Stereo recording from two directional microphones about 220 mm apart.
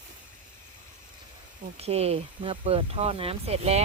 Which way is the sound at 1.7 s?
30° right (ahead or behind).